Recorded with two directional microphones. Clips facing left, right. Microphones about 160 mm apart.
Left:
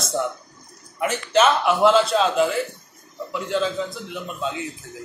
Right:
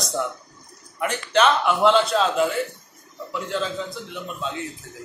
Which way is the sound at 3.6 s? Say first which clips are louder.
Left 3 dB; centre (ahead or behind).